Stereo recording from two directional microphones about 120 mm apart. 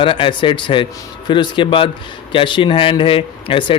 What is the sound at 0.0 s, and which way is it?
A man's voice, 45° left (ahead or behind).